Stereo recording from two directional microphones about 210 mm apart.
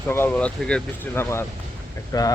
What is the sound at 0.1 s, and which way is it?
Speech, 10° left (ahead or behind).